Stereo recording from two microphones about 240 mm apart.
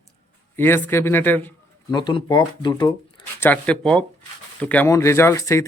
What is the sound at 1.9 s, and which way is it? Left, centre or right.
Speech, centre.